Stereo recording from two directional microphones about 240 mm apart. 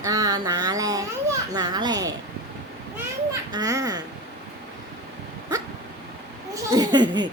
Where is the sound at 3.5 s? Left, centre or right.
Centre.